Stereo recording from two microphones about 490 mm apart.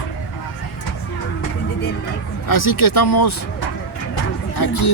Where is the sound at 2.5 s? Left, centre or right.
Left.